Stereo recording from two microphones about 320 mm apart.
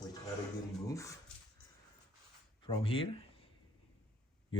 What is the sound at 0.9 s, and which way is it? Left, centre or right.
Speech, centre.